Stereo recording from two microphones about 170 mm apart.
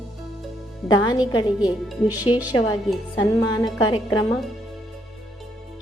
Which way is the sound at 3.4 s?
20° left (ahead or behind).